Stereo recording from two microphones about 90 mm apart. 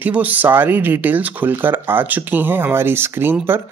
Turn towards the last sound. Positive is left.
turn(degrees=-25)  # may be behind; listen again after turning